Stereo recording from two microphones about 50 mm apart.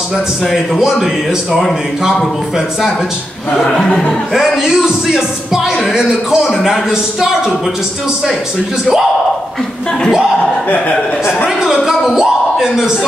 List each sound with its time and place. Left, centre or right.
0.7 s a man's voice: centre
3.6 s speech: centre
4.6 s speech: centre
10.7 s a man's voice: left
11.4 s a sound: centre
12.2 s speech: centre